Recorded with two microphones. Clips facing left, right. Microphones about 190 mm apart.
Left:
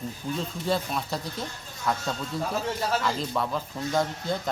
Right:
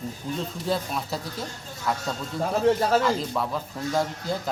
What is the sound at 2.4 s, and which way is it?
Speech, 45° right (ahead or behind).